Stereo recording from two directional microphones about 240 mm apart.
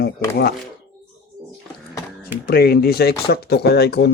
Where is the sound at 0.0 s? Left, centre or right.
Left.